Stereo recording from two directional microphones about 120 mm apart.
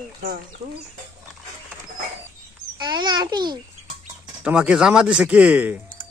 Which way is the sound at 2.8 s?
40° right (ahead or behind).